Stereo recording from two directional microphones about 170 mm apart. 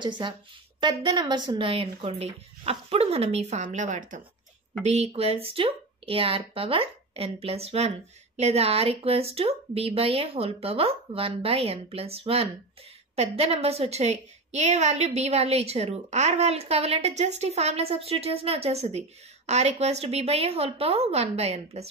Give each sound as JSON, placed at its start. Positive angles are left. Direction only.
{"t": 0.0, "sound": "a woman's voice", "side_deg": -25}